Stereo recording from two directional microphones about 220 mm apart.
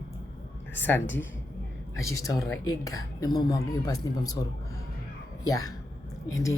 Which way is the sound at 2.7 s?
15° left (ahead or behind).